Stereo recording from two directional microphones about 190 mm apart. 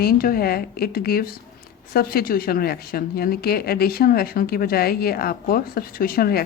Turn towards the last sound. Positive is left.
turn(degrees=50)  # may be behind; listen again after turning